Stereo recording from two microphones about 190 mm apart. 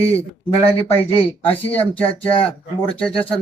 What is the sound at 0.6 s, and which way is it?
Speech, 30° left (ahead or behind).